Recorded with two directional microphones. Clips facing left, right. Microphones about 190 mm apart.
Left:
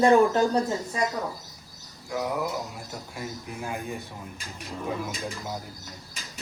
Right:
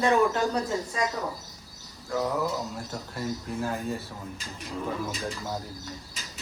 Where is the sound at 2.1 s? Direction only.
10° left (ahead or behind).